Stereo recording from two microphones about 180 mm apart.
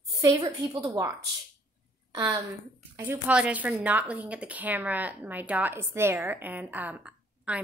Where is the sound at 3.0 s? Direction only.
10° right (ahead or behind).